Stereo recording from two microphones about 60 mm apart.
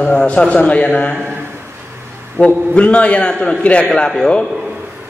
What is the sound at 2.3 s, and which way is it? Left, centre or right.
A man's voice, left.